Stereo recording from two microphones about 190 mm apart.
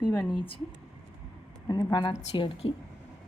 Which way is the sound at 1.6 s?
20° left (ahead or behind).